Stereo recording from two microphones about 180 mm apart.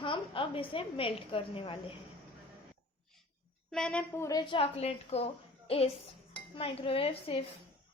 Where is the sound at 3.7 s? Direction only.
5° left (ahead or behind); by 7.4 s 30° left (ahead or behind).